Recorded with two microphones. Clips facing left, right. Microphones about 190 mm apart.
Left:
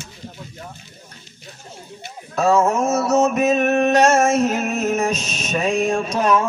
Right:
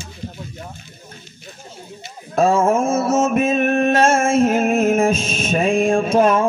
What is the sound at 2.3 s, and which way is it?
Music, 50° right (ahead or behind).